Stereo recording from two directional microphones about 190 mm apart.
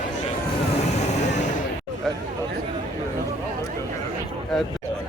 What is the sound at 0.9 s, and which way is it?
Vehicle, 35° left (ahead or behind).